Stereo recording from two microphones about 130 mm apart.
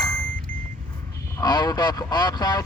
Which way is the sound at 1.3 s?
35° left (ahead or behind).